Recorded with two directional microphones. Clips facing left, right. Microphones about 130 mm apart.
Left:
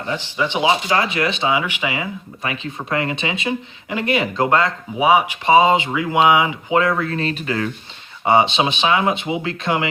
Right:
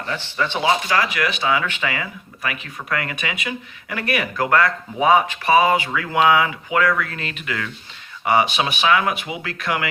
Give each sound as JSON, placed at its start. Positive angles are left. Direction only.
{"t": 0.1, "sound": "speech", "side_deg": 15}
{"t": 4.9, "sound": "speech", "side_deg": 10}